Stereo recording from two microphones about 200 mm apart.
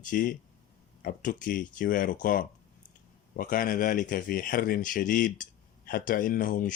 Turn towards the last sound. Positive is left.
turn(degrees=45)  # may be behind; listen again after turning